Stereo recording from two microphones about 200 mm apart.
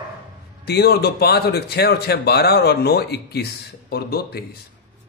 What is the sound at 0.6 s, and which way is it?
A man's voice, 55° left (ahead or behind).